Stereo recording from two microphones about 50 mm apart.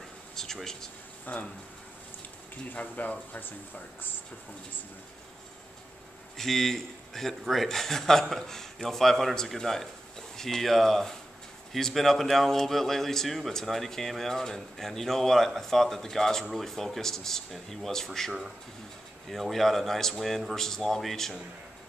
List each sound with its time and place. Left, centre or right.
0.4 s speech: centre
1.2 s speech: left
2.7 s speech: left
6.3 s a man's voice: centre